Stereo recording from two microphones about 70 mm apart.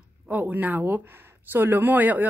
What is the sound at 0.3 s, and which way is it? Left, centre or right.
Speech, right.